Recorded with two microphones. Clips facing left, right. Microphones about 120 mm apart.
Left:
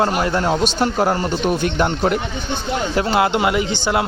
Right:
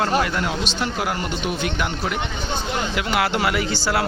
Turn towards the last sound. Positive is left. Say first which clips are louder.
# left 3 dB
turn(degrees=20)  # may be behind; listen again after turning